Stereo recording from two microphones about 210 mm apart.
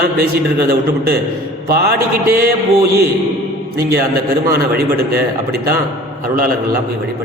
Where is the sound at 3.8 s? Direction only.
45° right (ahead or behind).